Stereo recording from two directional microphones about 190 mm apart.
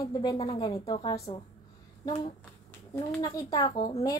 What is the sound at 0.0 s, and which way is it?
Speech, 20° left (ahead or behind).